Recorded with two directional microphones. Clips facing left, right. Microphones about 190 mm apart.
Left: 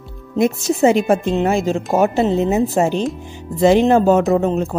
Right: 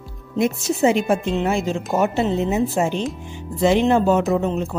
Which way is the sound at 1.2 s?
45° left (ahead or behind).